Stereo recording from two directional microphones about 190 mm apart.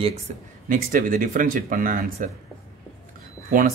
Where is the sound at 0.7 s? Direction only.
45° right (ahead or behind).